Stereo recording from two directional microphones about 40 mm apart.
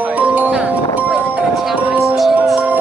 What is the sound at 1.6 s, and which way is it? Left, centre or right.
Music, centre.